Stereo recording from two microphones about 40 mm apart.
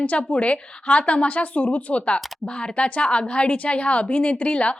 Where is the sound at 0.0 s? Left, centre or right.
Left.